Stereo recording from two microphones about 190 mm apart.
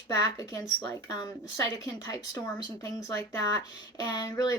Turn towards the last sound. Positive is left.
turn(degrees=20)  # may be behind; listen again after turning